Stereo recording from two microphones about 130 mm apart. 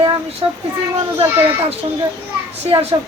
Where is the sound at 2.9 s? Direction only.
30° right (ahead or behind).